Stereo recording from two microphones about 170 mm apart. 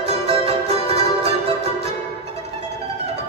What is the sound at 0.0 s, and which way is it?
Music, 35° right (ahead or behind).